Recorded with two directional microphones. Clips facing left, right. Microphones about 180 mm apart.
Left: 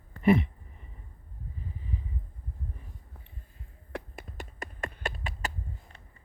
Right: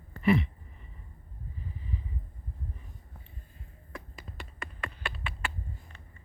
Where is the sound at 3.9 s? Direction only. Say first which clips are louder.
Left 6 dB; 65° left (ahead or behind).